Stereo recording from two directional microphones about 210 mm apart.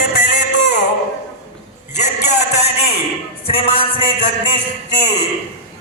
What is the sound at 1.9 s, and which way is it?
Speech, 35° left (ahead or behind).